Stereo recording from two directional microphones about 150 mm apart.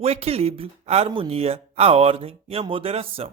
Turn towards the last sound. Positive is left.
turn(degrees=-40)  # may be behind; listen again after turning